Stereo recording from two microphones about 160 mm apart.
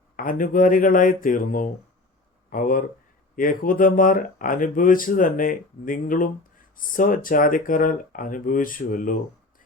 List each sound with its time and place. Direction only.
0.2 s speech: 60° left (ahead or behind)